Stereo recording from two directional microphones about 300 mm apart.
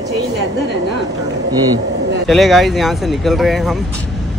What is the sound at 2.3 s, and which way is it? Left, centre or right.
Speech, centre.